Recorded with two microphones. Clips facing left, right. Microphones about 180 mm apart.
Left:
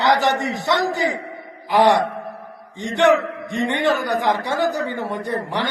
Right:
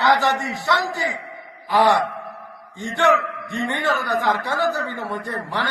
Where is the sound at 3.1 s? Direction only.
35° left (ahead or behind).